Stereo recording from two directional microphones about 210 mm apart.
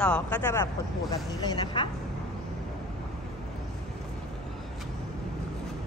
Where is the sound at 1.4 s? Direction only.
20° left (ahead or behind).